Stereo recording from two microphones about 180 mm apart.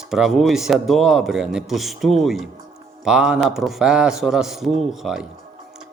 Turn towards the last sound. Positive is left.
turn(degrees=0)  # may be behind; listen again after turning